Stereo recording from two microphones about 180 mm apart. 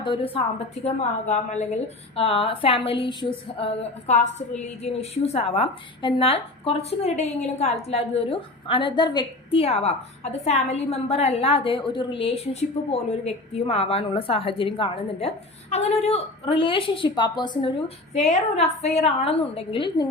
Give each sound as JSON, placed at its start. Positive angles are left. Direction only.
{"t": 0.0, "sound": "a woman's voice", "side_deg": 25}
{"t": 0.9, "sound": "a woman's voice", "side_deg": 40}